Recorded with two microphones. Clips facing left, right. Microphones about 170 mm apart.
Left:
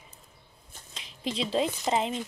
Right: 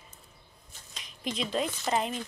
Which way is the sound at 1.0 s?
25° left (ahead or behind).